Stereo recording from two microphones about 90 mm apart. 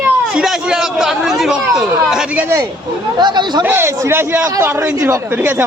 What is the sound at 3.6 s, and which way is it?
Speech, 25° right (ahead or behind).